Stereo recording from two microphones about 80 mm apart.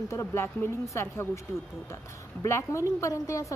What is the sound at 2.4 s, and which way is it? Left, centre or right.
Speech, left.